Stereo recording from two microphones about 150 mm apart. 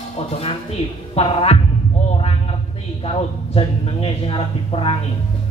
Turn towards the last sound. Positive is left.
turn(degrees=40)  # may be behind; listen again after turning